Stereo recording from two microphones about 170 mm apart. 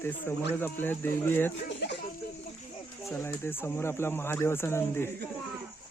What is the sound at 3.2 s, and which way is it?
Speech, 15° left (ahead or behind).